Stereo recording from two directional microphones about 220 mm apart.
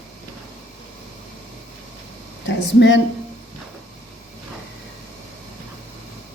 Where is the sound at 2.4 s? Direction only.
55° left (ahead or behind).